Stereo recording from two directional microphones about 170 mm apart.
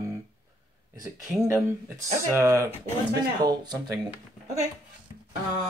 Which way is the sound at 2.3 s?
15° right (ahead or behind).